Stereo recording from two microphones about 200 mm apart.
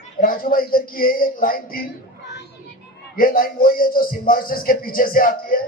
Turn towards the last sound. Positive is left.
turn(degrees=45)  # may be behind; listen again after turning